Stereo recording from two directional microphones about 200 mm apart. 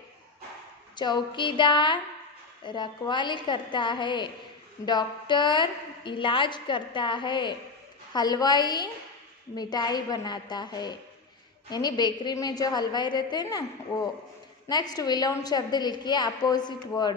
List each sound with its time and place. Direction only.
0.9 s a woman's voice: 20° left (ahead or behind)
14.7 s a woman's voice: 20° left (ahead or behind)